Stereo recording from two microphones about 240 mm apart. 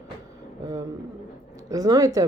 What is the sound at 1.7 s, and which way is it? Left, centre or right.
Speech, centre.